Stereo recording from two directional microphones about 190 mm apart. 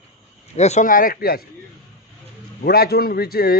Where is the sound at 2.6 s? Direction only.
55° left (ahead or behind).